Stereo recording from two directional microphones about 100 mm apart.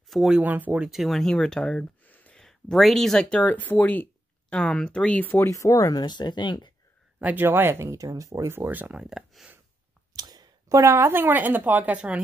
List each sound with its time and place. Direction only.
0.1 s speech: 5° right (ahead or behind)
0.4 s speech: 15° right (ahead or behind)
0.8 s speech: centre (ahead or behind); by 2.4 s 15° left (ahead or behind)
2.4 s speech: 5° left (ahead or behind)
5.5 s speech: 30° left (ahead or behind)
5.9 s speech: 45° left (ahead or behind)
7.2 s speech: 15° right (ahead or behind)
8.6 s speech: 15° right (ahead or behind)
9.0 s speech: 5° right (ahead or behind)
10.1 s speech: 40° right (ahead or behind); by 12.2 s 15° right (ahead or behind)